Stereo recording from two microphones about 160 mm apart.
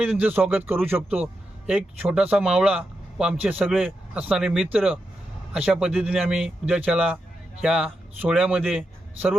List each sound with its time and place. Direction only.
0.0 s a man's voice: 10° right (ahead or behind)